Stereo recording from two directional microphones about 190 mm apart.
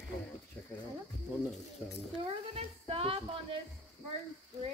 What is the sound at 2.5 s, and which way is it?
Speech, 30° right (ahead or behind).